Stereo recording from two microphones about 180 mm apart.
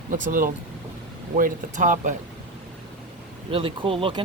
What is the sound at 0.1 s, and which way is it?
Speech, 50° right (ahead or behind).